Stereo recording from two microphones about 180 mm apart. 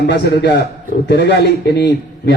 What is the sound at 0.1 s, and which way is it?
A man's voice, 70° left (ahead or behind).